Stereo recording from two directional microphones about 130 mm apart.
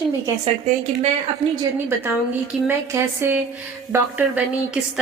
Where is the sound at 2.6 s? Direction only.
20° right (ahead or behind).